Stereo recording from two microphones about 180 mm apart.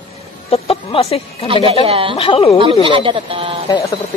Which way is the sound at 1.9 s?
30° right (ahead or behind).